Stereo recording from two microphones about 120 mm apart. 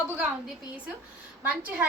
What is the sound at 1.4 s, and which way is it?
Speech, 15° right (ahead or behind).